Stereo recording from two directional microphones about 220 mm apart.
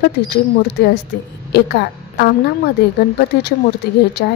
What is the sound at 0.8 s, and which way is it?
A woman's voice, 45° left (ahead or behind).